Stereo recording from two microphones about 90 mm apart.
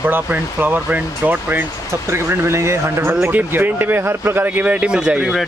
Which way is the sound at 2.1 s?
30° right (ahead or behind).